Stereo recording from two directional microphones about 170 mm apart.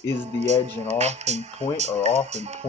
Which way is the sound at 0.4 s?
40° right (ahead or behind).